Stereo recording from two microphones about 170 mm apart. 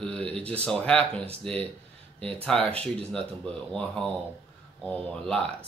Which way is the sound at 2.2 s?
5° left (ahead or behind).